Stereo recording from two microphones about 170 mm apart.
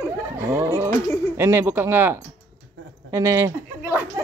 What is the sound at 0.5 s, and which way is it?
A woman's voice, 15° right (ahead or behind).